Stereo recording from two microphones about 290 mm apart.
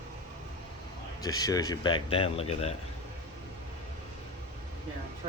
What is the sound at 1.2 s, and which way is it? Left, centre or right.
Speech, centre.